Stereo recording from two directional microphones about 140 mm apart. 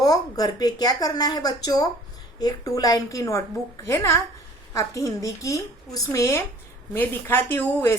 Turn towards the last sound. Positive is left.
turn(degrees=15)  # may be behind; listen again after turning